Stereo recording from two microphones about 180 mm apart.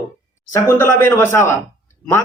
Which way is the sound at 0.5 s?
15° left (ahead or behind).